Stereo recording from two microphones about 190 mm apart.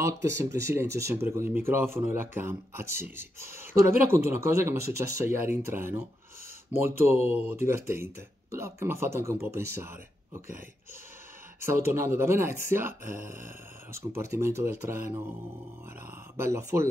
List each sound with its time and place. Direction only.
0.0 s speech: 15° right (ahead or behind)
11.6 s speech: 15° right (ahead or behind)
16.3 s speech: 15° right (ahead or behind)